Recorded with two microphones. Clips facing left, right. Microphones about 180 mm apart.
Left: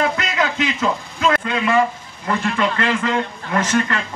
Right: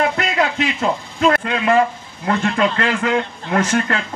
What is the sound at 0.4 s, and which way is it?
A man's voice, 35° right (ahead or behind).